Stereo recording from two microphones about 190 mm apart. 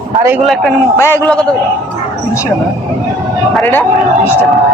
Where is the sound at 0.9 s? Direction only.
15° left (ahead or behind).